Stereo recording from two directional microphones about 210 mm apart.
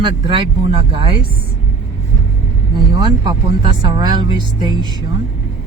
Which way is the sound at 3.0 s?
20° right (ahead or behind).